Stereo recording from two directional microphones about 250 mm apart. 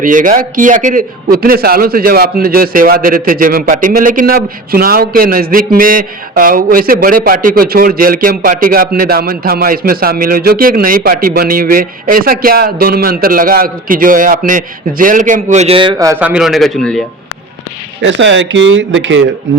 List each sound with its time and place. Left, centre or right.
0.0 s a man's voice: right; by 17.0 s centre
18.0 s speech: right